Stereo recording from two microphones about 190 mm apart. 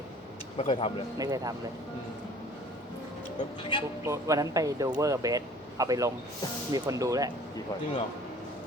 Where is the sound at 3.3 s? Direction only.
25° left (ahead or behind).